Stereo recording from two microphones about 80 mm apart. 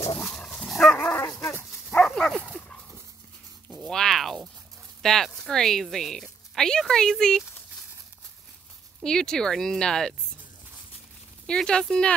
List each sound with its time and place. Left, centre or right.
0.7 s dog: centre
2.4 s dog: centre
3.6 s a sound: centre
5.0 s speech: centre
9.0 s speech: centre
11.4 s speech: centre